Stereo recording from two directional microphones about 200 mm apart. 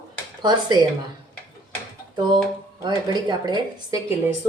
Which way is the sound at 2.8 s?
20° right (ahead or behind).